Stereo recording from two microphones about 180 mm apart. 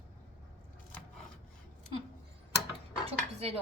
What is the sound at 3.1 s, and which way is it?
Dishes, 35° right (ahead or behind).